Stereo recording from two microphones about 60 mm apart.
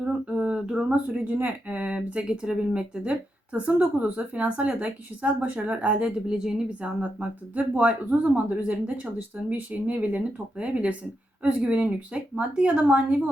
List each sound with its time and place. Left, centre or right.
0.0 s a sound: right
0.5 s speech: centre
6.8 s speech: right